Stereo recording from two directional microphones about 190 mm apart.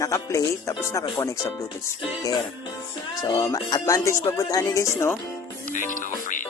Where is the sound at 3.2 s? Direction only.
20° left (ahead or behind).